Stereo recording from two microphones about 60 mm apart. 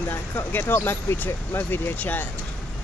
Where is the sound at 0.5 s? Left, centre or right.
Left.